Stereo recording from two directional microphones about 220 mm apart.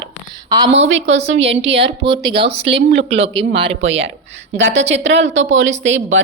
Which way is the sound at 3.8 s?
60° right (ahead or behind).